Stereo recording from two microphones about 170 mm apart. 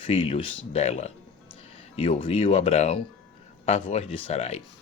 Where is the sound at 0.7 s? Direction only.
40° left (ahead or behind).